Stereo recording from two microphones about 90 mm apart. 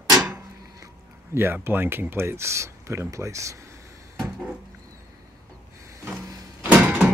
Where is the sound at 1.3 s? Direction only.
25° right (ahead or behind).